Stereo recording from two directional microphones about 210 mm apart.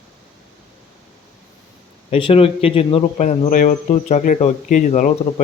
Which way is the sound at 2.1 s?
25° left (ahead or behind).